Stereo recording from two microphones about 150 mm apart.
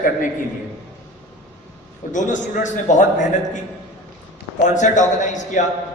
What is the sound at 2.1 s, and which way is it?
A man's voice, 55° left (ahead or behind).